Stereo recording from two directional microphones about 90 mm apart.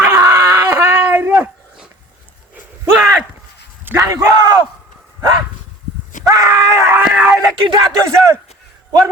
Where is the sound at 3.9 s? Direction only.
20° right (ahead or behind).